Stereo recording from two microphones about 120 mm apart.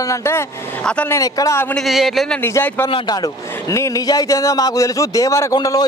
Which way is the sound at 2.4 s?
20° left (ahead or behind).